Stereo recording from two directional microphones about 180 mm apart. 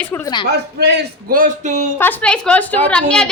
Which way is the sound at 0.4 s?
65° right (ahead or behind).